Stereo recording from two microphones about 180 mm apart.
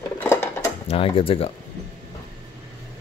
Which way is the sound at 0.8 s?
30° left (ahead or behind).